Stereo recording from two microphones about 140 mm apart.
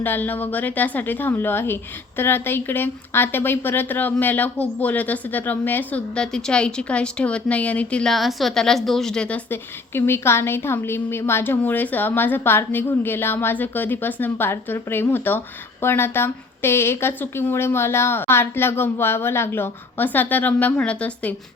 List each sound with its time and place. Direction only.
0.0 s a woman's voice: 15° left (ahead or behind)